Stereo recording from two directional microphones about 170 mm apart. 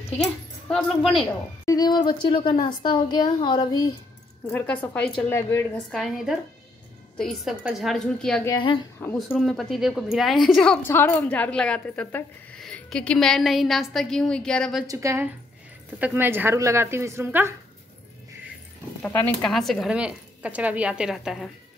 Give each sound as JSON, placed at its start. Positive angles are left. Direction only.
{"t": 0.2, "sound": "speech", "side_deg": 5}
{"t": 1.7, "sound": "a woman's voice", "side_deg": 25}
{"t": 4.5, "sound": "a woman's voice", "side_deg": 10}
{"t": 5.8, "sound": "a woman's voice", "side_deg": 0}
{"t": 8.5, "sound": "a woman's voice", "side_deg": 30}
{"t": 9.3, "sound": "a woman's voice", "side_deg": 0}
{"t": 14.9, "sound": "speech", "side_deg": -15}
{"t": 19.0, "sound": "a woman's voice", "side_deg": 5}